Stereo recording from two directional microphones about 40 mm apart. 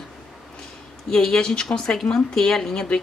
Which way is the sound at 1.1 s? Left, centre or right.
Centre.